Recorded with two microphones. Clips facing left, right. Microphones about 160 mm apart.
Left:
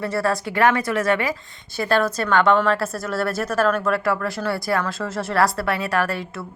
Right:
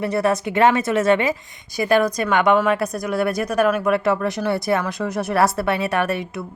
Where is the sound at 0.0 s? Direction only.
20° right (ahead or behind).